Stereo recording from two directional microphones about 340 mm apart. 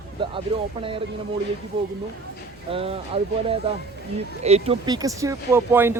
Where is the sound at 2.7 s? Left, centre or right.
Centre.